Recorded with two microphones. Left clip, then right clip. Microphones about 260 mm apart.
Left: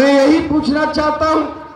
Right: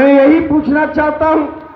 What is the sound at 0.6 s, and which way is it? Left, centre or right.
Speech, left.